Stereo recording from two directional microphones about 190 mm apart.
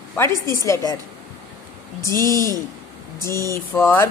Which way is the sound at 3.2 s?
15° left (ahead or behind).